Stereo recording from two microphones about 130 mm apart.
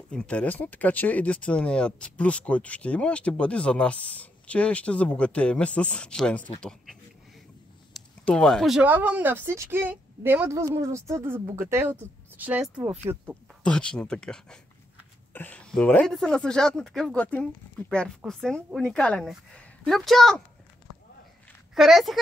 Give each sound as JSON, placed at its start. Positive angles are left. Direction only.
{"t": 0.1, "sound": "speech", "side_deg": 5}
{"t": 7.9, "sound": "a sound", "side_deg": 5}
{"t": 8.8, "sound": "a woman's voice", "side_deg": -15}
{"t": 13.7, "sound": "speech", "side_deg": 5}
{"t": 21.7, "sound": "speech", "side_deg": 0}